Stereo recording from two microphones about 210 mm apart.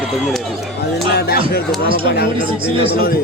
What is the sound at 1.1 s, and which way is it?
Speech, 50° left (ahead or behind).